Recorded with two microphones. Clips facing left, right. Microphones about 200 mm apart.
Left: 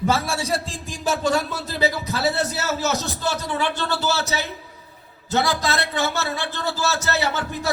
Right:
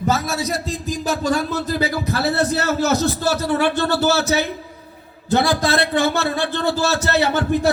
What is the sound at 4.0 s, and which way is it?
Speech, 55° right (ahead or behind).